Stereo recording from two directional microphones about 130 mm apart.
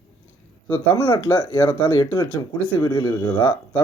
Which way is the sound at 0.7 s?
35° left (ahead or behind).